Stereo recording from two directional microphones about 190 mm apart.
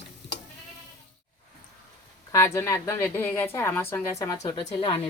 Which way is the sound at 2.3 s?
15° left (ahead or behind).